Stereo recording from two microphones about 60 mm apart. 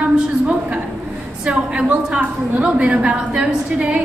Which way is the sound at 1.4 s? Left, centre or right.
Right.